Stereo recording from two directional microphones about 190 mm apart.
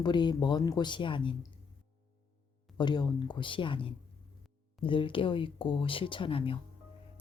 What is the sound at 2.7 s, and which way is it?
Speech, 25° left (ahead or behind).